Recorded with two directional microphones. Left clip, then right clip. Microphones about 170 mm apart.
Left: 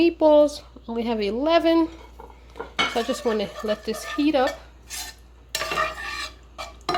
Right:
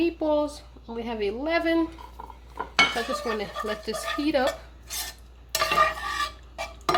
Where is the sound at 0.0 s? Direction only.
50° left (ahead or behind).